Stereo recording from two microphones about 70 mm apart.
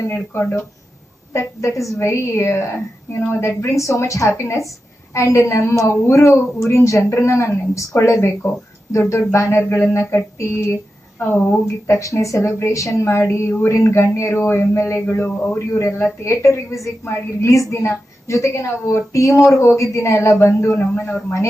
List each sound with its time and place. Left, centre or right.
0.1 s speech: left
1.3 s a woman's voice: left
3.6 s a woman's voice: left
8.1 s speech: left
8.9 s a woman's voice: left
11.9 s a woman's voice: left